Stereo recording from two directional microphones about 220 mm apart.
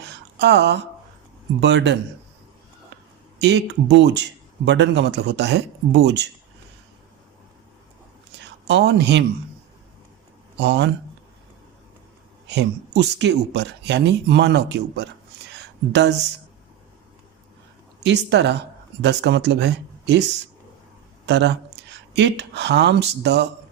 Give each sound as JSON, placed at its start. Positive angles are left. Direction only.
{"t": 0.0, "sound": "a sound", "side_deg": -50}
{"t": 1.6, "sound": "speech", "side_deg": -50}
{"t": 3.3, "sound": "speech", "side_deg": -50}
{"t": 8.4, "sound": "speech", "side_deg": -50}
{"t": 10.6, "sound": "speech", "side_deg": -50}
{"t": 12.5, "sound": "speech", "side_deg": -50}
{"t": 18.0, "sound": "speech", "side_deg": -50}
{"t": 21.2, "sound": "speech", "side_deg": -50}